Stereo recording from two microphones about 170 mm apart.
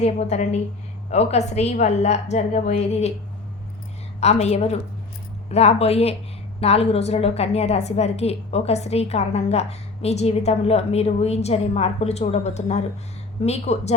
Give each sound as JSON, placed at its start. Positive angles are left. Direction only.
{"t": 0.0, "sound": "a woman's voice", "side_deg": 40}
{"t": 4.2, "sound": "a woman's voice", "side_deg": 40}